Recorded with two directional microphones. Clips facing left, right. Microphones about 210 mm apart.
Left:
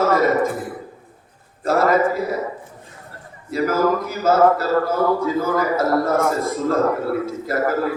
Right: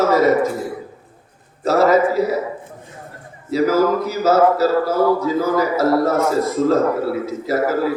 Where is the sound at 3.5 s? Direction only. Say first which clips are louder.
Right 3 dB; 50° left (ahead or behind).